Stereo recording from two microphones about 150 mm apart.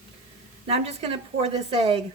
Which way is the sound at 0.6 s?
40° right (ahead or behind).